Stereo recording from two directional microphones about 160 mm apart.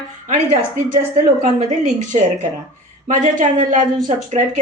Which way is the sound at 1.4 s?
45° right (ahead or behind).